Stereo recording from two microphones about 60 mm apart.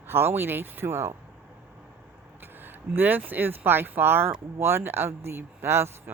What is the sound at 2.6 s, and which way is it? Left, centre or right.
Speech, right.